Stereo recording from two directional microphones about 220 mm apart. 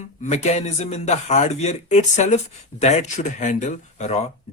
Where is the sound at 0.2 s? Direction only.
30° left (ahead or behind).